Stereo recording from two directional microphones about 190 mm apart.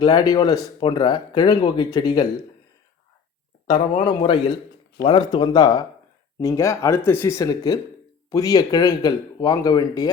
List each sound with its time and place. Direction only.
0.0 s speech: 20° left (ahead or behind)
3.7 s speech: 25° left (ahead or behind)